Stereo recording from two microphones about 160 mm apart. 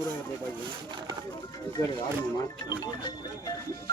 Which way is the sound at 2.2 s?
25° left (ahead or behind).